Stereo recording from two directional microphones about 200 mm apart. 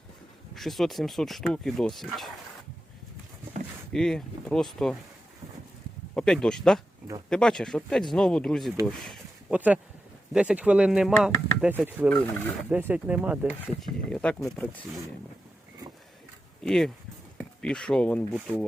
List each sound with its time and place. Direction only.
0.5 s speech: centre (ahead or behind)
3.9 s speech: 5° left (ahead or behind)
6.1 s speech: 5° left (ahead or behind)
8.9 s a sound: centre (ahead or behind)
9.6 s speech: 5° right (ahead or behind)
12.0 s speech: 10° left (ahead or behind)
12.7 s speech: 5° right (ahead or behind)
16.6 s speech: centre (ahead or behind)